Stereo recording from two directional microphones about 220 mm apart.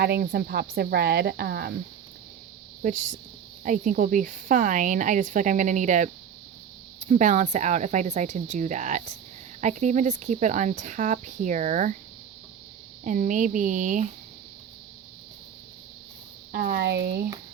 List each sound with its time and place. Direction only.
0.0 s a woman's voice: 45° right (ahead or behind)
2.8 s speech: 35° right (ahead or behind)
13.1 s speech: 35° right (ahead or behind)
16.5 s a woman's voice: 45° right (ahead or behind)